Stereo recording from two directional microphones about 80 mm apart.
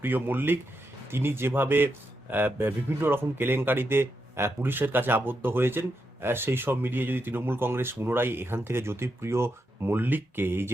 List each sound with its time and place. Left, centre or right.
0.0 s a man's voice: right